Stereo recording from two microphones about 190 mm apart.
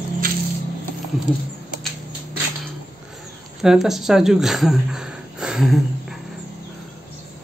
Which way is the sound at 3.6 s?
Centre (ahead or behind).